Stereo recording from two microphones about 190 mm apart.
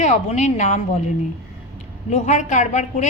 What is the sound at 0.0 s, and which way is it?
Speech, 40° left (ahead or behind).